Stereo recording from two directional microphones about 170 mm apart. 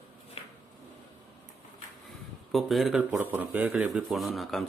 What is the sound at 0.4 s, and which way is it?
Drawer open or close, 35° left (ahead or behind).